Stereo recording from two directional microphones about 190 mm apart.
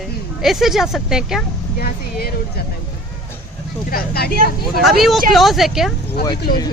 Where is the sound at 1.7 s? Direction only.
55° left (ahead or behind).